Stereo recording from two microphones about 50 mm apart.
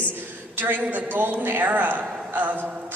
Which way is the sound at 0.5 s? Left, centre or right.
Right.